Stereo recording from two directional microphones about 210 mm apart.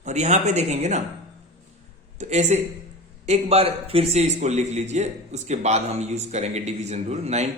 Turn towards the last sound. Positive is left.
turn(degrees=-30)  # may be behind; listen again after turning